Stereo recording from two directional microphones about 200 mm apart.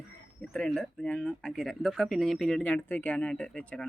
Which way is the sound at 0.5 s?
5° left (ahead or behind).